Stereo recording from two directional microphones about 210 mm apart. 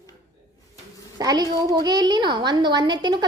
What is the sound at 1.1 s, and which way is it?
A woman's voice, 20° right (ahead or behind).